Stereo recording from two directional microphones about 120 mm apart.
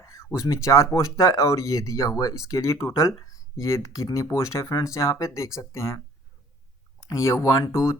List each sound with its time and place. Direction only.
0.0 s speech: 25° left (ahead or behind)
7.1 s speech: 25° left (ahead or behind)